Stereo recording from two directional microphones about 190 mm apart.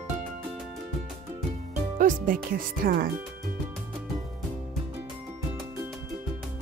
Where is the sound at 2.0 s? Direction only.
45° right (ahead or behind).